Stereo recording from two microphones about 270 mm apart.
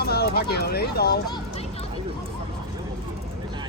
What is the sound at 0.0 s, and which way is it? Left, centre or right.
Speech, left.